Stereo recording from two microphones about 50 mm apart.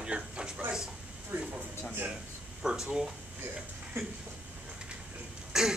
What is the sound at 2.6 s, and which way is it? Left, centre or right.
Speech, centre.